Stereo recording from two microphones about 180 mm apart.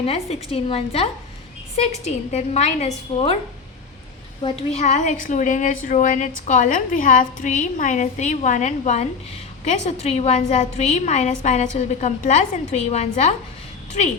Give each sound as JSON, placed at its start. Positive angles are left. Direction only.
{"t": 0.0, "sound": "a woman's voice", "side_deg": 35}
{"t": 4.4, "sound": "a woman's voice", "side_deg": 35}